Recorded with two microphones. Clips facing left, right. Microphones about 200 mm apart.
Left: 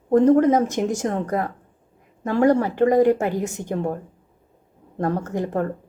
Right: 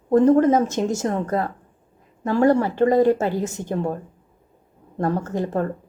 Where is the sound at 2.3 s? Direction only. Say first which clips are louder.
Even; 20° left (ahead or behind).